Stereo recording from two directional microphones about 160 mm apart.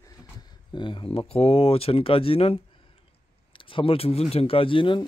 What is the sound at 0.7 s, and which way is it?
Speech, 30° left (ahead or behind).